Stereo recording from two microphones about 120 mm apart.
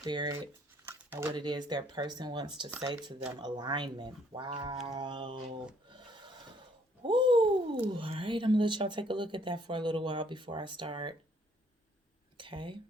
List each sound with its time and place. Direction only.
0.0 s speech: 40° right (ahead or behind)
0.9 s a sound: 20° right (ahead or behind)
1.3 s speech: 40° right (ahead or behind)
5.9 s a sound: 40° right (ahead or behind)
7.9 s speech: 45° right (ahead or behind)
12.4 s speech: 45° right (ahead or behind)